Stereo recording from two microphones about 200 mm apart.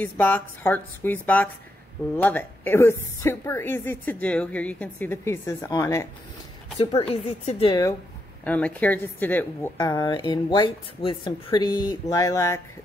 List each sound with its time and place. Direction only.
0.0 s a woman's voice: 10° left (ahead or behind)
6.8 s speech: 30° left (ahead or behind)
8.5 s a woman's voice: 5° left (ahead or behind)